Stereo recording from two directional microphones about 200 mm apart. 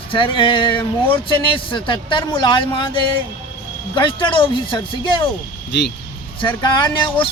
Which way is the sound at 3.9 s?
25° left (ahead or behind).